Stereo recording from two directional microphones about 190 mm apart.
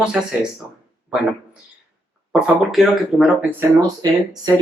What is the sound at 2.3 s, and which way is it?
Speech, 5° right (ahead or behind).